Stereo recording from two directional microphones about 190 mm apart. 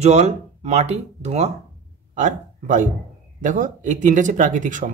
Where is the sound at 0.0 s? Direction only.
35° right (ahead or behind).